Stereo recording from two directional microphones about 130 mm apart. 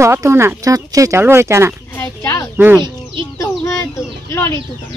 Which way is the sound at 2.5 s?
15° right (ahead or behind).